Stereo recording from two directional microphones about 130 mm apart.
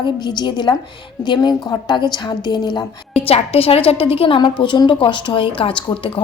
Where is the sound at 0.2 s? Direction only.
35° left (ahead or behind).